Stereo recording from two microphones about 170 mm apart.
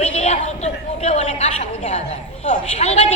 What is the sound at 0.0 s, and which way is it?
A woman's voice, 40° left (ahead or behind).